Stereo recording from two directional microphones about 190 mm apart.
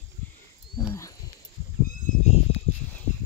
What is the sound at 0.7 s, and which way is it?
Speech, 15° left (ahead or behind).